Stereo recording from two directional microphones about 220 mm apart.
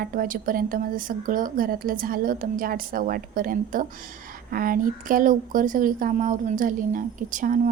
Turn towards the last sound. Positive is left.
turn(degrees=-35)  # may be behind; listen again after turning